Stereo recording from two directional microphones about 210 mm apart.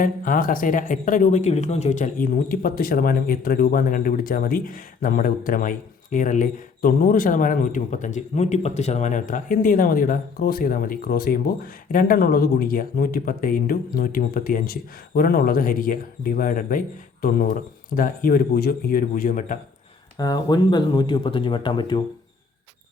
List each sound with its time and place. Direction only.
0.0 s speech: 40° left (ahead or behind)
20.1 s speech: 20° left (ahead or behind)